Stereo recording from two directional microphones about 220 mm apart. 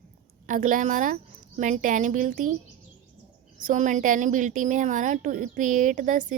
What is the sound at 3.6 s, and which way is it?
A woman's voice, 35° right (ahead or behind).